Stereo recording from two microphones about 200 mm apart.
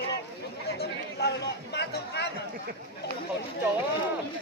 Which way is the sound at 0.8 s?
55° left (ahead or behind).